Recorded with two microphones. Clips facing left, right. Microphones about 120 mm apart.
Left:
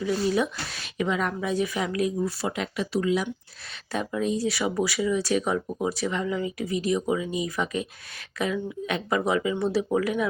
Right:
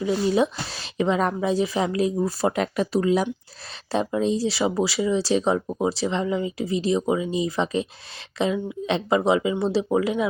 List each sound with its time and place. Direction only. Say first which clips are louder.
0.0 s a woman's voice: right 3 dB; 25° right (ahead or behind)
3.9 s speech: right 4 dB; 30° right (ahead or behind)